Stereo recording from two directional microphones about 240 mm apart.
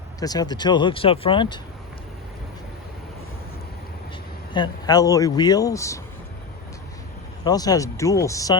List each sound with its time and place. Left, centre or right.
0.2 s speech: centre
4.5 s speech: centre
7.4 s speech: centre